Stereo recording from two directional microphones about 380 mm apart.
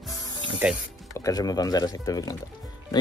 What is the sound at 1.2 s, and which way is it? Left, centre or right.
Speech, centre.